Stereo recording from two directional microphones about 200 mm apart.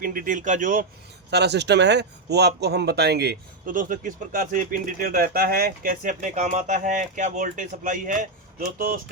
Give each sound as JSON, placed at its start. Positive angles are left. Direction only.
{"t": 0.0, "sound": "speech", "side_deg": -45}
{"t": 1.3, "sound": "speech", "side_deg": -55}